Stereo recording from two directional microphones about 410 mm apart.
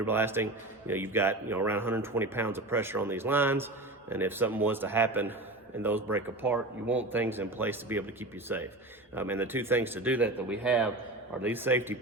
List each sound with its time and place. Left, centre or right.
0.0 s speech: centre